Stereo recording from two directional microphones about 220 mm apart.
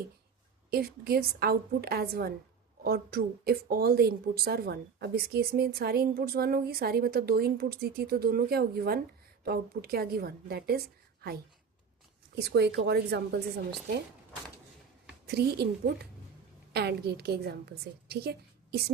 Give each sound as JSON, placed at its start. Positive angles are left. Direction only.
{"t": 0.7, "sound": "speech", "side_deg": -45}
{"t": 15.3, "sound": "speech", "side_deg": -45}